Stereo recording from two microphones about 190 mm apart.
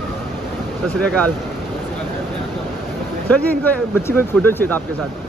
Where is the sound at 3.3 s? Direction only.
10° left (ahead or behind).